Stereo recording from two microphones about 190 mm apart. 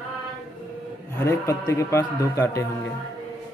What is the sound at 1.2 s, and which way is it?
Speech, 15° left (ahead or behind).